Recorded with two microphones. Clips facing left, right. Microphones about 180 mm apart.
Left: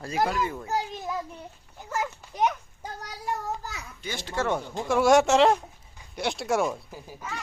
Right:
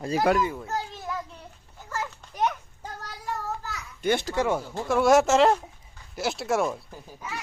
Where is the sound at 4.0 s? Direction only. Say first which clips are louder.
Right 12 dB; 60° right (ahead or behind).